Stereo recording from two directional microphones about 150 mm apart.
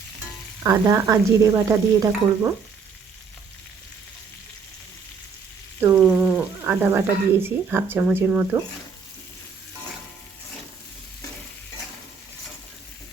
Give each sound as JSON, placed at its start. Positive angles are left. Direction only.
{"t": 0.6, "sound": "speech", "side_deg": -20}
{"t": 5.8, "sound": "a sound", "side_deg": -10}
{"t": 7.4, "sound": "speech", "side_deg": -15}